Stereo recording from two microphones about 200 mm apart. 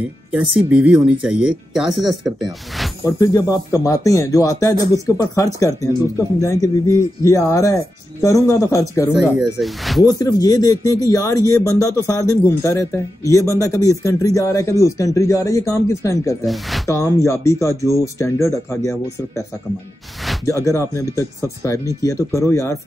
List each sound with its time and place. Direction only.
0.6 s speech: 5° right (ahead or behind)
3.1 s a man's voice: 20° left (ahead or behind)
9.1 s speech: centre (ahead or behind)
10.0 s a man's voice: 20° left (ahead or behind)
20.4 s a man's voice: 15° left (ahead or behind)